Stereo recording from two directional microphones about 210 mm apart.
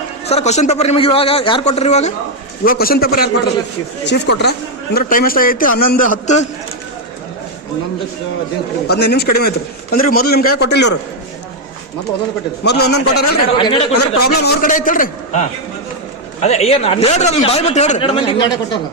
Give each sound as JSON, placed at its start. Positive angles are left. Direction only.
{"t": 0.3, "sound": "a man's voice", "side_deg": 30}
{"t": 2.6, "sound": "a man's voice", "side_deg": 45}
{"t": 8.9, "sound": "a man's voice", "side_deg": 50}
{"t": 12.6, "sound": "a man's voice", "side_deg": 50}
{"t": 13.6, "sound": "a man's voice", "side_deg": 25}
{"t": 14.2, "sound": "a man's voice", "side_deg": 45}